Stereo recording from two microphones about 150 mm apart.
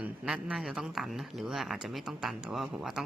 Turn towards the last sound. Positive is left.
turn(degrees=-5)  # may be behind; listen again after turning